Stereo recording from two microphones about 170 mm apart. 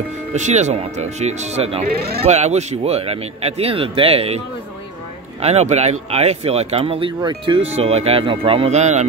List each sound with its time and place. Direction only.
0.3 s speech: 40° right (ahead or behind)
5.4 s speech: 40° right (ahead or behind)
7.7 s speech: 35° right (ahead or behind)